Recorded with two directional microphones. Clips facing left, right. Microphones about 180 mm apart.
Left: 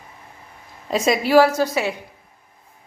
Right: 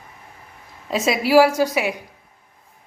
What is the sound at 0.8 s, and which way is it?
A woman's voice, centre (ahead or behind).